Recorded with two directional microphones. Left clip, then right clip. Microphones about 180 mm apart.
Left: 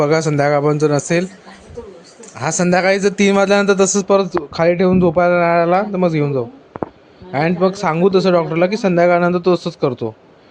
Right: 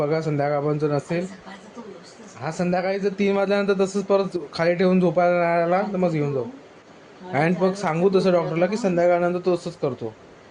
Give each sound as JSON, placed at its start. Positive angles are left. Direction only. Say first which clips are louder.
{"t": 0.0, "sound": "a man's voice", "louder": "left 8 dB", "side_deg": 40}
{"t": 2.4, "sound": "a man's voice", "louder": "left 9 dB", "side_deg": 40}
{"t": 7.6, "sound": "a man's voice", "louder": "left 6 dB", "side_deg": 35}